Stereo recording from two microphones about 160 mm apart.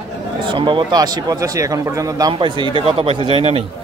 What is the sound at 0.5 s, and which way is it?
A man's voice, 30° right (ahead or behind).